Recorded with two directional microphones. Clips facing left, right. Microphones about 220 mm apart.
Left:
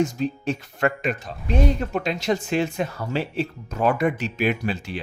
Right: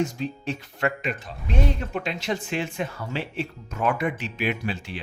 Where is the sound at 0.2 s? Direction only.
45° left (ahead or behind).